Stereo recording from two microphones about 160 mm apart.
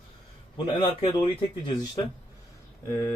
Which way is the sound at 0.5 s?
30° left (ahead or behind).